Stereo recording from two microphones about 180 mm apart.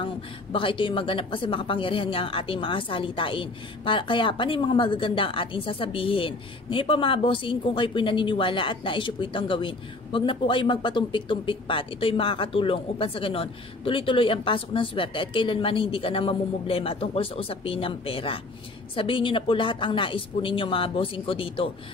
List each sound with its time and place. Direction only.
0.0 s speech: 30° left (ahead or behind)